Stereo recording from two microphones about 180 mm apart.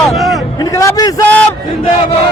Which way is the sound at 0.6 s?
15° left (ahead or behind).